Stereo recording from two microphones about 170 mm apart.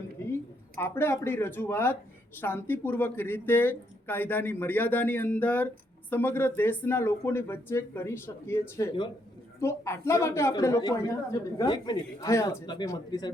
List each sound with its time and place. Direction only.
0.8 s a man's voice: 15° left (ahead or behind)